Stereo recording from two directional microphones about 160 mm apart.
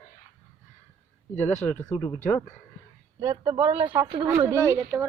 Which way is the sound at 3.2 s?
30° right (ahead or behind).